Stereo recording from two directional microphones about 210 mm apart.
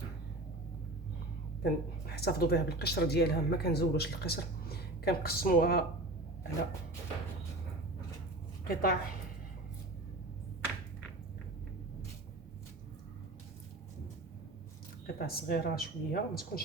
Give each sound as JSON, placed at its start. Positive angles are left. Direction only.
{"t": 1.6, "sound": "speech", "side_deg": 50}
{"t": 8.6, "sound": "speech", "side_deg": 45}
{"t": 15.0, "sound": "speech", "side_deg": 45}